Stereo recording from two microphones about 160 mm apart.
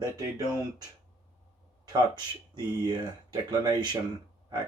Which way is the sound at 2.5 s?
30° right (ahead or behind).